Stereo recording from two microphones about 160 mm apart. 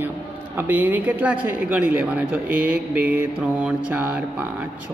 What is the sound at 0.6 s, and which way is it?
A man's voice, 10° right (ahead or behind).